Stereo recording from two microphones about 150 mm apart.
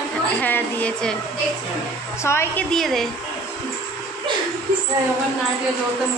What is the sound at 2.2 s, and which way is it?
Speech, 15° left (ahead or behind).